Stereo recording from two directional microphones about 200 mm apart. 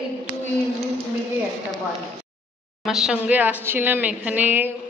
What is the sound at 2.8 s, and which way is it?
A woman's voice, centre (ahead or behind).